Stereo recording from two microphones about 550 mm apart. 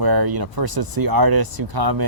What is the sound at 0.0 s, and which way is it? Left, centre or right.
Speech, right.